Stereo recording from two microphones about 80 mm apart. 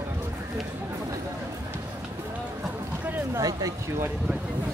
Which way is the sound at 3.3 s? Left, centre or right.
Right.